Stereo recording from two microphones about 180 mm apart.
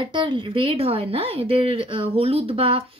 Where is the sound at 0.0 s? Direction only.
25° right (ahead or behind).